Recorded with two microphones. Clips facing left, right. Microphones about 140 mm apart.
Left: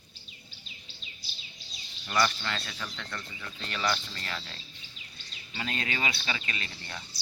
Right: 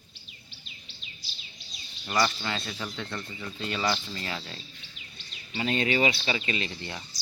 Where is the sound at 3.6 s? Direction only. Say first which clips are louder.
Right 2 dB; 10° right (ahead or behind).